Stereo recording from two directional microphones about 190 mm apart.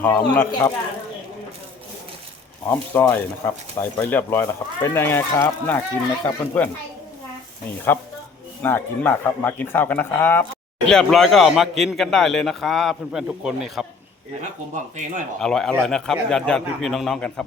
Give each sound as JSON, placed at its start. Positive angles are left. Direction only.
{"t": 0.0, "sound": "speech", "side_deg": 10}
{"t": 2.6, "sound": "speech", "side_deg": 10}
{"t": 8.6, "sound": "speech", "side_deg": 10}
{"t": 14.7, "sound": "speech", "side_deg": -40}
{"t": 15.4, "sound": "speech", "side_deg": 5}